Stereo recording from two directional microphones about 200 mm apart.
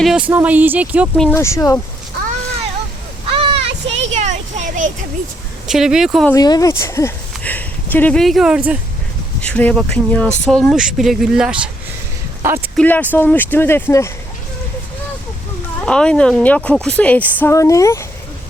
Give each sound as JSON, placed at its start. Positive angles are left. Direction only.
{"t": 0.0, "sound": "speech", "side_deg": -5}
{"t": 1.4, "sound": "speech", "side_deg": 15}
{"t": 3.3, "sound": "children playing", "side_deg": -30}
{"t": 5.6, "sound": "a woman's voice", "side_deg": -5}
{"t": 6.2, "sound": "speech", "side_deg": 20}
{"t": 9.4, "sound": "a woman's voice", "side_deg": 5}
{"t": 12.4, "sound": "a sound", "side_deg": -10}
{"t": 12.7, "sound": "speech", "side_deg": 10}
{"t": 15.8, "sound": "a woman's voice", "side_deg": 5}